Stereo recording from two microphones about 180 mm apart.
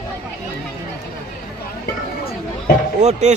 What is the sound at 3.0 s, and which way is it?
Speech, 40° right (ahead or behind).